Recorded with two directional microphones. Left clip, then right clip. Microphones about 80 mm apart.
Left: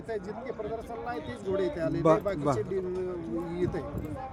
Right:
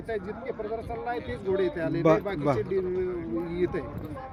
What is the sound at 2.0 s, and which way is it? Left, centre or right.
Speech, centre.